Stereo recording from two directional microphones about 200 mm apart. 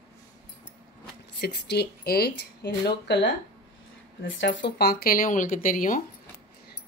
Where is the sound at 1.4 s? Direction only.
55° left (ahead or behind).